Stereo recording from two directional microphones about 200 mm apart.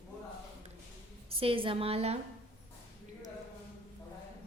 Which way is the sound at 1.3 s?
25° right (ahead or behind).